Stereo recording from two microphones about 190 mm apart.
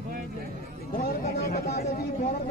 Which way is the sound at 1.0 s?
55° left (ahead or behind).